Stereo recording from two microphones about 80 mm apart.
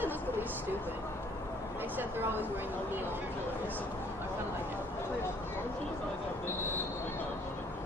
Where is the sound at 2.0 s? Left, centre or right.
Right.